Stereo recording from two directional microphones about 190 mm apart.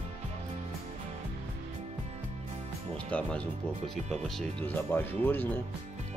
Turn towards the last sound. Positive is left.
turn(degrees=10)  # may be behind; listen again after turning